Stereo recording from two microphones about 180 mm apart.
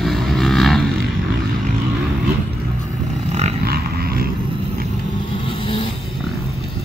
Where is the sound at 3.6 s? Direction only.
60° right (ahead or behind).